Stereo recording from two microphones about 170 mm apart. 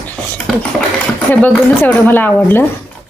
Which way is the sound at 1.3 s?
10° left (ahead or behind).